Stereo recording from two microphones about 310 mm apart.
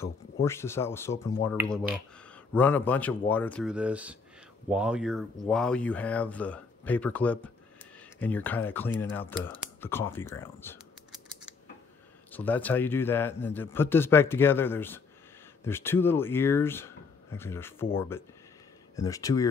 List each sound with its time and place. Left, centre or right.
0.0 s a man's voice: centre
10.4 s typing: centre
12.3 s a man's voice: centre